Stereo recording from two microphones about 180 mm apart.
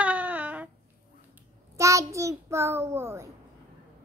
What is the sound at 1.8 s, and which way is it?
Child singing, 15° right (ahead or behind).